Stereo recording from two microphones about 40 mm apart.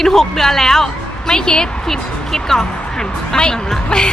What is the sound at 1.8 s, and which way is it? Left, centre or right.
Speech, centre.